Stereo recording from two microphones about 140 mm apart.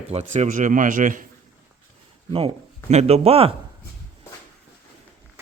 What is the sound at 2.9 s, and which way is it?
Speech, 50° right (ahead or behind).